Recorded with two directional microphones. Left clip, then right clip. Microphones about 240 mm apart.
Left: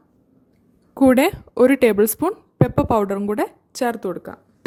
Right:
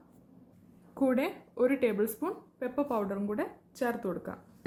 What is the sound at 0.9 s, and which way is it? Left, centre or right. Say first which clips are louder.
A woman's voice: left 14 dB; left.